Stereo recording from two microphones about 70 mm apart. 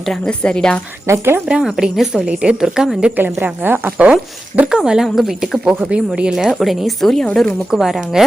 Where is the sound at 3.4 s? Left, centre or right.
Right.